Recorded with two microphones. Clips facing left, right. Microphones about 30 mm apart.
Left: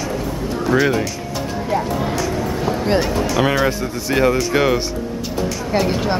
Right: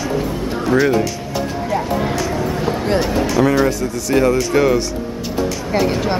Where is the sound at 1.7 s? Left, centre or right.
Centre.